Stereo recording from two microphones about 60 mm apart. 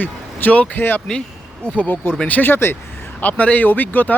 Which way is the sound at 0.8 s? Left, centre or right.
Left.